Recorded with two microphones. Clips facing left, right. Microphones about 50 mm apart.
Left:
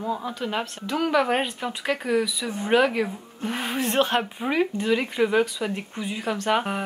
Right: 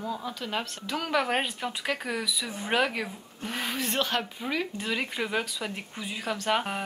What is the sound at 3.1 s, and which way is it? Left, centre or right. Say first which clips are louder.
Speech: left 5 dB; centre.